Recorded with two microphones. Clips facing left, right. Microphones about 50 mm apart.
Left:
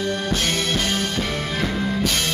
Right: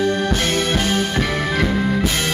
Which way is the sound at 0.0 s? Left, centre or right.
Right.